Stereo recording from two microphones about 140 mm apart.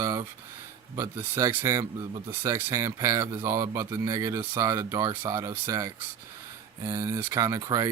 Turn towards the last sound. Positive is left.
turn(degrees=-25)  # may be behind; listen again after turning